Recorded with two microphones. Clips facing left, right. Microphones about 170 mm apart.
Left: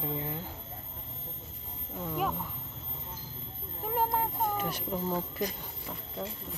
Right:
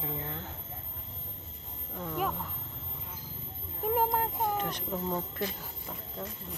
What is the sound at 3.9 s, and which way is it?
Speech, centre (ahead or behind).